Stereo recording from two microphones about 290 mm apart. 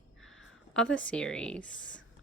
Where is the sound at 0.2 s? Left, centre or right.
Centre.